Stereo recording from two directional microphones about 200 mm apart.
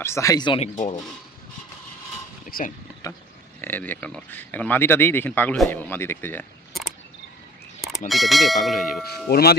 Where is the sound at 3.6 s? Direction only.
10° left (ahead or behind).